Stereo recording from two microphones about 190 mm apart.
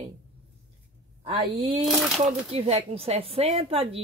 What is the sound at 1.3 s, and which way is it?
Speech, 30° right (ahead or behind).